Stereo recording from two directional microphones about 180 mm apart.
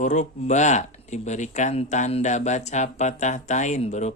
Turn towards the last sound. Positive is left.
turn(degrees=40)  # may be behind; listen again after turning